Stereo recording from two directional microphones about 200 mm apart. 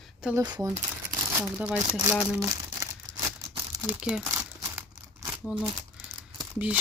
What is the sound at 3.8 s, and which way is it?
Speech, 5° right (ahead or behind).